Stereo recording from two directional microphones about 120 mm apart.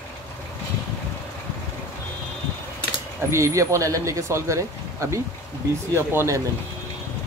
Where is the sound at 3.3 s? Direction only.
25° right (ahead or behind).